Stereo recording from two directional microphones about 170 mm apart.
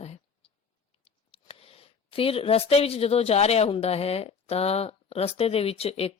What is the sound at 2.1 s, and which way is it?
Speech, 35° left (ahead or behind).